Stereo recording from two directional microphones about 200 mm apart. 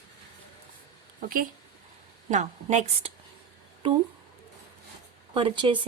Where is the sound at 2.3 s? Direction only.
35° right (ahead or behind).